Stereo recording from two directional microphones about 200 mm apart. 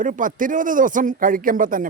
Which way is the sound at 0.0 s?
40° right (ahead or behind).